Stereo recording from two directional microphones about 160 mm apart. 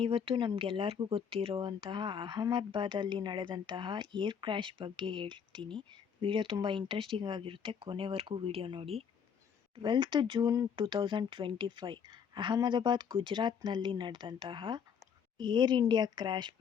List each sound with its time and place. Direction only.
0.0 s speech: 35° right (ahead or behind)